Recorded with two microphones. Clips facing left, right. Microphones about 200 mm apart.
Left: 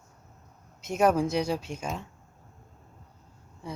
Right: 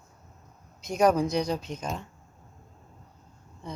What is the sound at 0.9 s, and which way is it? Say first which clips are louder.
Speech: right 1 dB; 5° left (ahead or behind).